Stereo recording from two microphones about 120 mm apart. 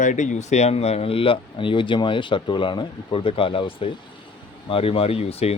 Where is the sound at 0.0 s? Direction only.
90° left.